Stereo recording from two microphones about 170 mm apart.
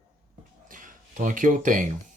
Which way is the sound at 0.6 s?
50° right (ahead or behind).